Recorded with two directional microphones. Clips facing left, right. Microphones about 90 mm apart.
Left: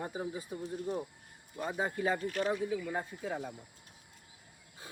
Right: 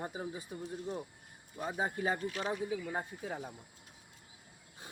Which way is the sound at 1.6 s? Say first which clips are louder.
Left 2 dB; 15° right (ahead or behind).